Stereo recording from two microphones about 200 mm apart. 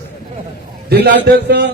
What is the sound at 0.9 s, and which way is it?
Speech, 55° right (ahead or behind).